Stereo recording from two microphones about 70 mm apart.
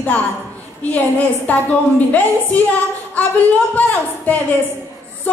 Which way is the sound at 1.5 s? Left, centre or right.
Left.